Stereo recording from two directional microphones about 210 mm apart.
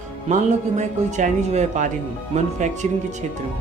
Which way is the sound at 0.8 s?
35° right (ahead or behind).